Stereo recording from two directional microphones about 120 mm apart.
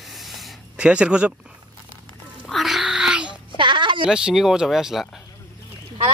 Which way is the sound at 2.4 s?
Centre (ahead or behind).